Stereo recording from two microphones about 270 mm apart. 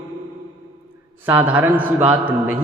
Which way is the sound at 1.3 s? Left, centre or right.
Centre.